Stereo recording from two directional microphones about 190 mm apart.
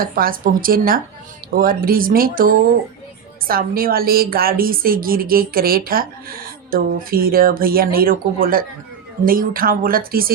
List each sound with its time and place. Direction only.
0.0 s a woman's voice: 50° right (ahead or behind)